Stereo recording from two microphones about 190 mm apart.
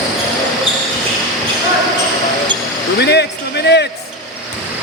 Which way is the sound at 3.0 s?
60° left (ahead or behind).